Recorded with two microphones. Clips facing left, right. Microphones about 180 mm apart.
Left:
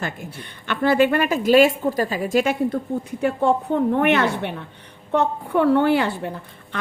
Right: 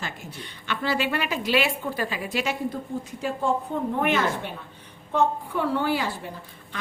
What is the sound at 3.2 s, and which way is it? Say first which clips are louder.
A woman's voice: left 6 dB; 65° left (ahead or behind).